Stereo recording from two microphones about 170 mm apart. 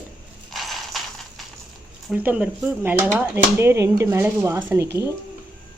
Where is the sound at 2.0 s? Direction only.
10° right (ahead or behind).